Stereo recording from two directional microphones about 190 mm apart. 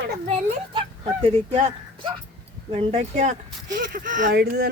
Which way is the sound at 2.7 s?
35° right (ahead or behind).